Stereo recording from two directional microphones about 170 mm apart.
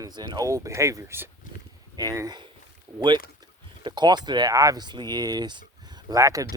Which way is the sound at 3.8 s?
25° right (ahead or behind).